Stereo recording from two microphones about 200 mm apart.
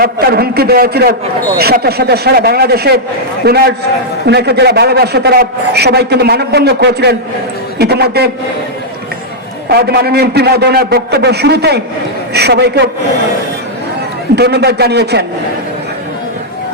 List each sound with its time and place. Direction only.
0.0 s a man's voice: 50° right (ahead or behind)
9.7 s a man's voice: 55° right (ahead or behind)
14.3 s a man's voice: 55° right (ahead or behind)